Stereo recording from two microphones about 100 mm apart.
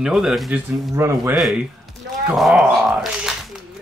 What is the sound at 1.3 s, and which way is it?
Speech, centre (ahead or behind).